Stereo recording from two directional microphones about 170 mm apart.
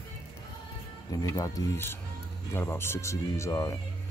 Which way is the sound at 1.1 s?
20° left (ahead or behind).